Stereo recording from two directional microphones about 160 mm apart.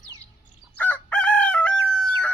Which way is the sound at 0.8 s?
10° left (ahead or behind).